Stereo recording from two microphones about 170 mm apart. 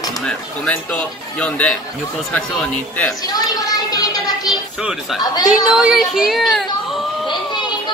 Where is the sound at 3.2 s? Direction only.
20° left (ahead or behind).